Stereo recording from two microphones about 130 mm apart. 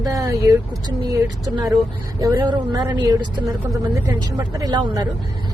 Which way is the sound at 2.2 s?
25° right (ahead or behind).